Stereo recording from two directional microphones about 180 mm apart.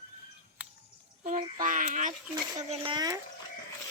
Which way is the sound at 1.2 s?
45° right (ahead or behind).